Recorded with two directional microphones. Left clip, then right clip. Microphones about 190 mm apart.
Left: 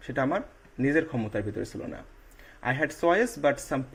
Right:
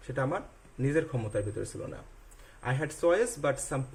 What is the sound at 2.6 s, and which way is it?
Speech, 20° left (ahead or behind).